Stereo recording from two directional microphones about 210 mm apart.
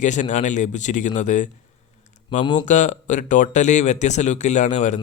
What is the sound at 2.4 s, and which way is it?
Speech, 20° left (ahead or behind).